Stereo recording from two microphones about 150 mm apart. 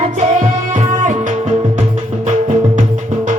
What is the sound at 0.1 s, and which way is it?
Music, 55° right (ahead or behind).